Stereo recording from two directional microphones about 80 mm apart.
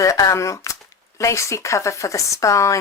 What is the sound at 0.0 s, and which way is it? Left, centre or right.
Speech, left.